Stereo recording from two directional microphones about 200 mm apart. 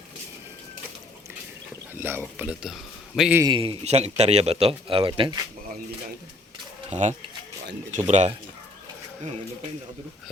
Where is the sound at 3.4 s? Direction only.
25° right (ahead or behind).